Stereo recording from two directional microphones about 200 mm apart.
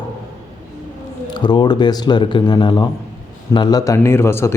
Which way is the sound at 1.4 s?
20° left (ahead or behind).